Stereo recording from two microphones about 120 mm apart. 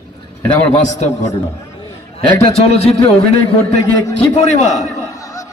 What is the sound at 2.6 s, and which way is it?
Speech, 55° left (ahead or behind).